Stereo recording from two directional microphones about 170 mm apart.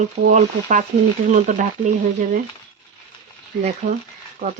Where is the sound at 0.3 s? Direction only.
45° right (ahead or behind).